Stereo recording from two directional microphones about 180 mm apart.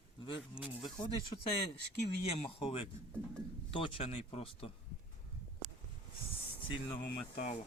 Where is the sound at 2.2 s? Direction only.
35° left (ahead or behind).